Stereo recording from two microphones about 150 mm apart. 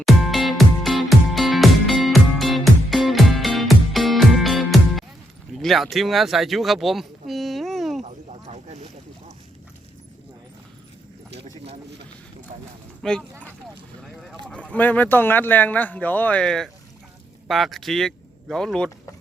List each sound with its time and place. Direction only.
0.0 s music: centre (ahead or behind)
5.5 s speech: centre (ahead or behind)
8.0 s a sound: 50° right (ahead or behind)
13.0 s speech: 5° left (ahead or behind)